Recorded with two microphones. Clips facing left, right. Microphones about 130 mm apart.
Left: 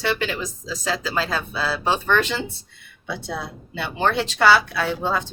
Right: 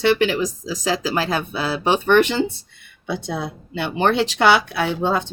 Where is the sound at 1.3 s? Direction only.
20° right (ahead or behind).